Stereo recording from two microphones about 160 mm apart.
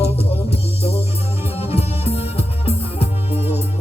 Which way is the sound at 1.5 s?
40° left (ahead or behind).